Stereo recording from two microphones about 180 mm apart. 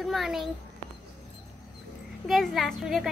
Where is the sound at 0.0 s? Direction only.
Centre (ahead or behind).